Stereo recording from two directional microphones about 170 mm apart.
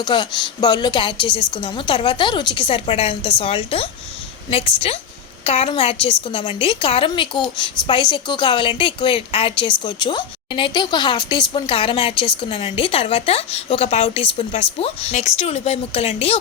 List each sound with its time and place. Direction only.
0.0 s a woman's voice: 25° left (ahead or behind)